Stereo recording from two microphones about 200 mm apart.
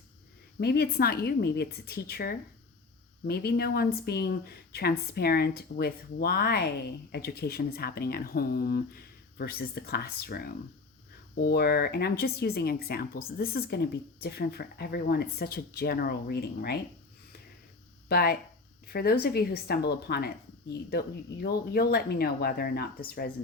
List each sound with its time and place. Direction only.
0.6 s speech: 50° left (ahead or behind)
18.1 s speech: 50° left (ahead or behind)